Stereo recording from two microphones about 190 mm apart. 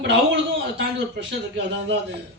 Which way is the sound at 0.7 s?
65° right (ahead or behind).